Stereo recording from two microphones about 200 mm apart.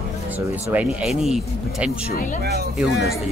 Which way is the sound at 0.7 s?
Centre (ahead or behind).